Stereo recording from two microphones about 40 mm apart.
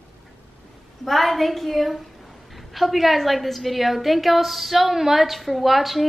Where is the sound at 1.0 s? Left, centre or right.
Centre.